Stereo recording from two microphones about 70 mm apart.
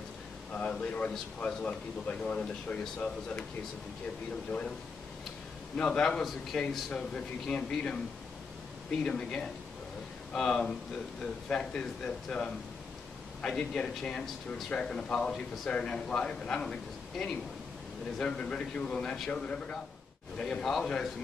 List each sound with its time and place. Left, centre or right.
0.5 s a man's voice: centre
5.8 s a man's voice: centre
9.0 s a man's voice: centre
18.2 s a man's voice: centre